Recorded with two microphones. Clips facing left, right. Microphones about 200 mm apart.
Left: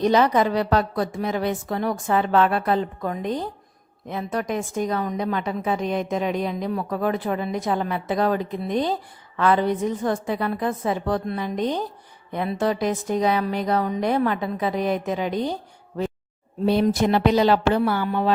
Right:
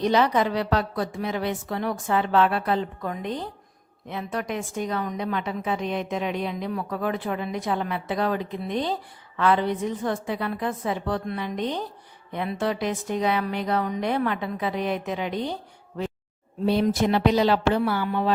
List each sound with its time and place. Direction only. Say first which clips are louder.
0.0 s a woman's voice: left 3 dB; 45° left (ahead or behind)
16.8 s a woman's voice: left 1 dB; 50° left (ahead or behind)